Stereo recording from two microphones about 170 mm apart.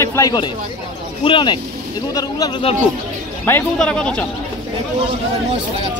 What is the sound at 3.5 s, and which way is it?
Speech, 10° left (ahead or behind).